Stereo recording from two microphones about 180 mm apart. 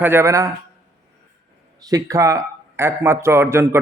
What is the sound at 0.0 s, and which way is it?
Speech, 15° right (ahead or behind).